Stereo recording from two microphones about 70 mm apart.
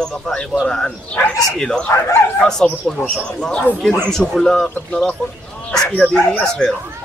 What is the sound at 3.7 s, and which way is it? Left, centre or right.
Speech, left.